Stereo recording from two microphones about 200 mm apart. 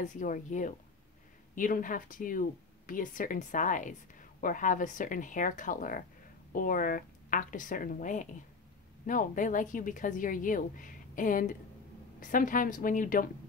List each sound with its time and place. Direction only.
0.0 s a woman's voice: 40° left (ahead or behind)